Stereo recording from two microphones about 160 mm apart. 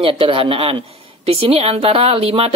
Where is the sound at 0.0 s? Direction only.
35° right (ahead or behind).